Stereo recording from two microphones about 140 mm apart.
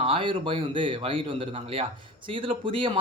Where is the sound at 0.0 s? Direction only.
40° right (ahead or behind).